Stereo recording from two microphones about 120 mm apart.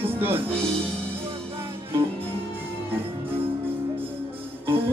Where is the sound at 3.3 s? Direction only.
15° right (ahead or behind).